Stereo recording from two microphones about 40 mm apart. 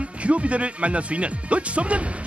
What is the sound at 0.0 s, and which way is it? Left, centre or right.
Speech, right.